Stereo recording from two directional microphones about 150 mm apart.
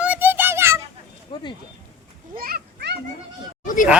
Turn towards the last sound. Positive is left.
turn(degrees=60)  # may be behind; listen again after turning